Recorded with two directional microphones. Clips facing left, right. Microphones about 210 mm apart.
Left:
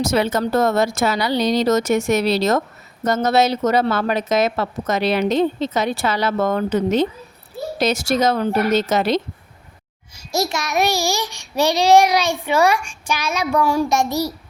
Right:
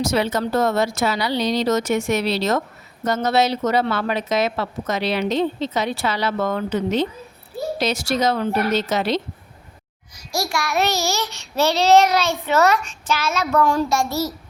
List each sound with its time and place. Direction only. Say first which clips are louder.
0.0 s speech: left 2 dB; 50° left (ahead or behind)
10.2 s a child's voice: left 3 dB; 20° left (ahead or behind)